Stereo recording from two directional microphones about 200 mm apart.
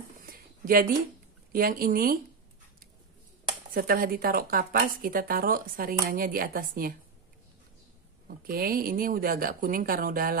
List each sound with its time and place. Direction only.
0.3 s a sound: 45° right (ahead or behind)
1.5 s speech: 45° right (ahead or behind)
3.7 s speech: 45° right (ahead or behind)
8.3 s speech: 45° right (ahead or behind)